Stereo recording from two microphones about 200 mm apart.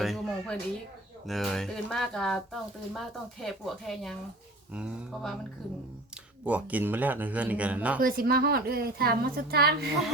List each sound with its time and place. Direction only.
0.0 s a sound: centre (ahead or behind)
1.3 s speech: centre (ahead or behind)
6.4 s speech: 5° right (ahead or behind)
8.0 s a woman's voice: 45° right (ahead or behind)